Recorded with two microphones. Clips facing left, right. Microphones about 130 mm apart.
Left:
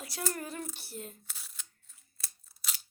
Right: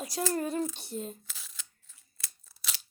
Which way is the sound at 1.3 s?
90° right.